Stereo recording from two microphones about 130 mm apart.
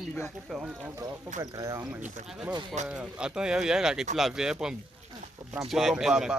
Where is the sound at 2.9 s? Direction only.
10° right (ahead or behind).